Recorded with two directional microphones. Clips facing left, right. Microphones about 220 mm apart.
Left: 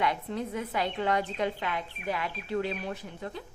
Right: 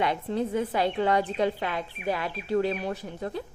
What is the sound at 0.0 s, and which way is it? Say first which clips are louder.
A woman's voice: right 4 dB; 30° right (ahead or behind).